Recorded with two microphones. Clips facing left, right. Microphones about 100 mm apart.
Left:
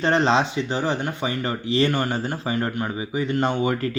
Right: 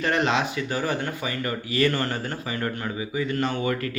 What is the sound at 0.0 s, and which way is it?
Speech, 30° left (ahead or behind).